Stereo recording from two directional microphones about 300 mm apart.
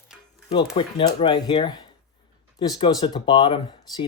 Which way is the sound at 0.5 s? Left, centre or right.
Centre.